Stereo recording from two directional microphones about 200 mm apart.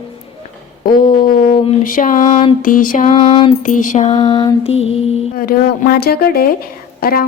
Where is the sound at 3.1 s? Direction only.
25° left (ahead or behind).